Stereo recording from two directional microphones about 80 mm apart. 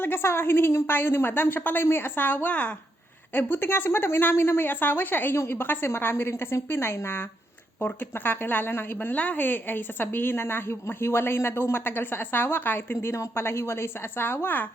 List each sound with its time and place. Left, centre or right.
0.0 s a woman's voice: left